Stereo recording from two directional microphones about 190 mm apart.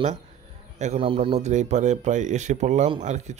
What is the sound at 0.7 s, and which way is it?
Speech, 35° right (ahead or behind).